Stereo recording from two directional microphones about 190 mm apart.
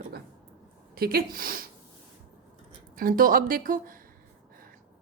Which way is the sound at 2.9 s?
50° right (ahead or behind).